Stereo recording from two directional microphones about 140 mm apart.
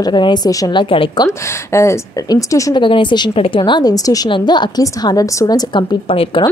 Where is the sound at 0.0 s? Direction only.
30° left (ahead or behind).